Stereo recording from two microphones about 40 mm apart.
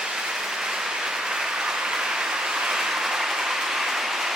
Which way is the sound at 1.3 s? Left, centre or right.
Centre.